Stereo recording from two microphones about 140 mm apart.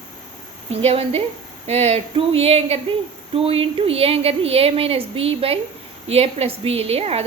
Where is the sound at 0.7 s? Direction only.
45° right (ahead or behind).